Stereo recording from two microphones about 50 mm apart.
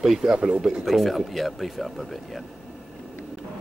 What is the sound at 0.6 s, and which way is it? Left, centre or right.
Speech, centre.